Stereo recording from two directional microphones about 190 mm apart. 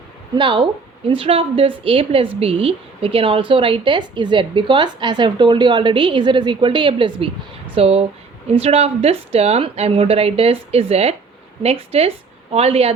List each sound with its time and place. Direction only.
0.3 s a woman's voice: 25° right (ahead or behind)